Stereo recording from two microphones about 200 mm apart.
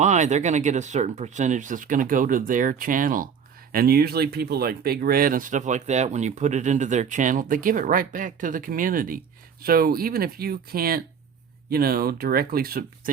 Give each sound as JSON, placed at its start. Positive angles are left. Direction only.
{"t": 0.0, "sound": "speech", "side_deg": -35}